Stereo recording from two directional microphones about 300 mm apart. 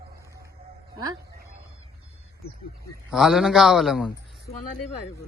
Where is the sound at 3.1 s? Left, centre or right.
Centre.